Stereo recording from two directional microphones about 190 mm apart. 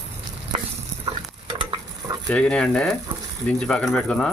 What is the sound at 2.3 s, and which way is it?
Speech, 5° left (ahead or behind).